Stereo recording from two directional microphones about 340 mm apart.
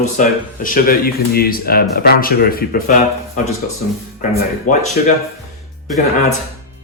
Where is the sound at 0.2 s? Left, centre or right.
Left.